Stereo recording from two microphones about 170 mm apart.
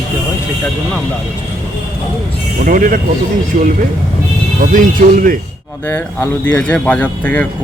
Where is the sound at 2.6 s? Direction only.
55° right (ahead or behind).